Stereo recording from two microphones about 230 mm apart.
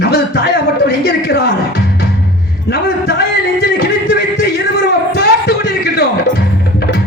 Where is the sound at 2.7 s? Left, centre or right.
Left.